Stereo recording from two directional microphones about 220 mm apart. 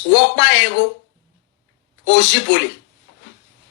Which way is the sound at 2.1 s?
55° left (ahead or behind).